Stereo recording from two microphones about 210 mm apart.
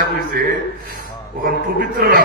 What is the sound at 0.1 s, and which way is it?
A man's voice, 45° right (ahead or behind).